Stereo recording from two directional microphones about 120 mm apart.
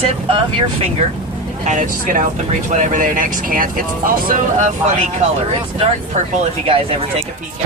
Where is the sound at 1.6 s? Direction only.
90° right.